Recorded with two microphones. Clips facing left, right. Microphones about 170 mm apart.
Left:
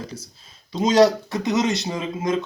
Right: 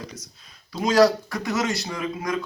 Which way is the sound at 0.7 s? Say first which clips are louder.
Left 2 dB; 20° left (ahead or behind).